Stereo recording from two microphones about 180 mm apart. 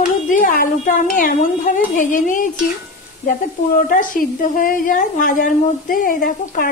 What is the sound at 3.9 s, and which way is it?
A woman's voice, 50° left (ahead or behind).